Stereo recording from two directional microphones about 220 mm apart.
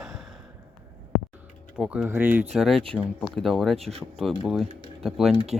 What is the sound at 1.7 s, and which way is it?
Speech, 5° right (ahead or behind).